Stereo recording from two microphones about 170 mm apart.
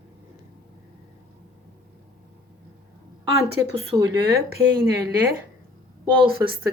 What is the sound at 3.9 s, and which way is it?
Speech, 15° right (ahead or behind).